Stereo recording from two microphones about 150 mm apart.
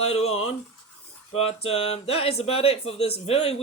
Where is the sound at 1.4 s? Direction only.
40° left (ahead or behind).